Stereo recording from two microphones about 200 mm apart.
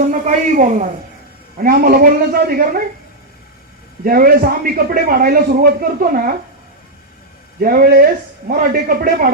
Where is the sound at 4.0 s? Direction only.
45° right (ahead or behind).